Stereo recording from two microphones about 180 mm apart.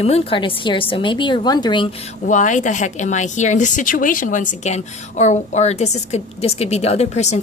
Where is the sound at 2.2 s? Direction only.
45° left (ahead or behind).